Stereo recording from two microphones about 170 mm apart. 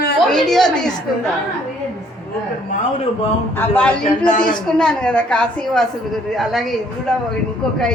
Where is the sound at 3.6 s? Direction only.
10° left (ahead or behind).